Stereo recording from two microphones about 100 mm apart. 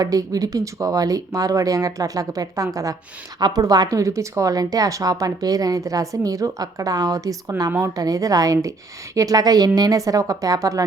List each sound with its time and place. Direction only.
0.0 s speech: 35° right (ahead or behind)